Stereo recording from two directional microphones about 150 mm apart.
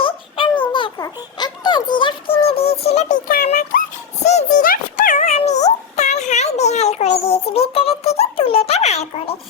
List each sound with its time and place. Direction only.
0.0 s a sound: 35° left (ahead or behind)
0.7 s music: 30° left (ahead or behind); by 3.2 s 45° left (ahead or behind)
3.2 s music: 75° left (ahead or behind)
4.2 s music: 50° left (ahead or behind)